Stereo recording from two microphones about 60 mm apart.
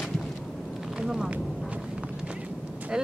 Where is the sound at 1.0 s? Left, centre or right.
Centre.